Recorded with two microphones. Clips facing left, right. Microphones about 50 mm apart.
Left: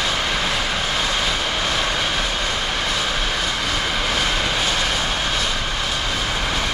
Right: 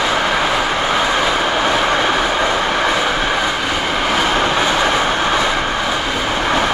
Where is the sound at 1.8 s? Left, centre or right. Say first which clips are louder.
Right 7 dB; right.